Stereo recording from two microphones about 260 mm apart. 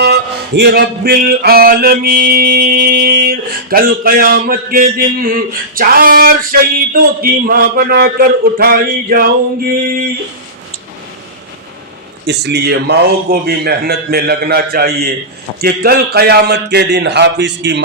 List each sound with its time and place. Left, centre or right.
0.0 s music: right
12.2 s music: right